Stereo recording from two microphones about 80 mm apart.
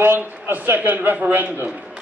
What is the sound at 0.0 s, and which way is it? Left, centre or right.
A man's voice, right.